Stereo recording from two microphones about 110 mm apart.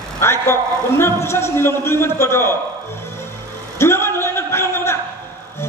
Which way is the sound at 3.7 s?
20° left (ahead or behind).